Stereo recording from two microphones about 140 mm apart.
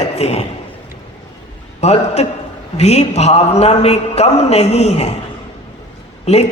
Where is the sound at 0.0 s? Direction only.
50° left (ahead or behind).